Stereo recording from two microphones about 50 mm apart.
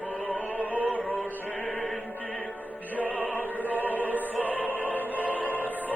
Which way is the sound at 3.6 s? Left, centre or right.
Left.